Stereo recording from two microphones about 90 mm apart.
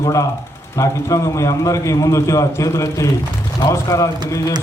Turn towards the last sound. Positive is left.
turn(degrees=35)  # may be behind; listen again after turning